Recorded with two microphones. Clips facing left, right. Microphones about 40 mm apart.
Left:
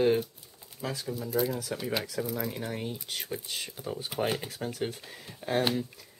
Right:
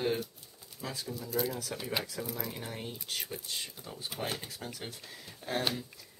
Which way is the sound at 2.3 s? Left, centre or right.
Centre.